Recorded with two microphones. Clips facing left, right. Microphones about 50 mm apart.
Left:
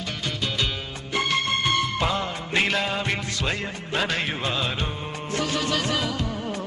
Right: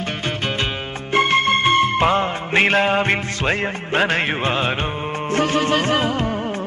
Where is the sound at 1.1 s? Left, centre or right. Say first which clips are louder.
Right 8 dB; right.